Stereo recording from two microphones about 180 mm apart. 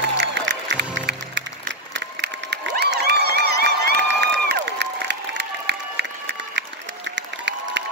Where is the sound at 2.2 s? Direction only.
65° right (ahead or behind).